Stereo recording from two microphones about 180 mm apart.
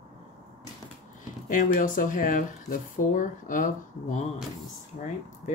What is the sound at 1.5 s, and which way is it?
Speech, 45° left (ahead or behind).